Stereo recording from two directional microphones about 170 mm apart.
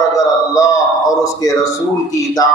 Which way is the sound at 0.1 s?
20° left (ahead or behind).